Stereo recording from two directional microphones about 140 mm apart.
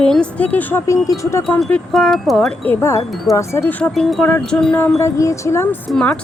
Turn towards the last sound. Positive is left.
turn(degrees=5)  # may be behind; listen again after turning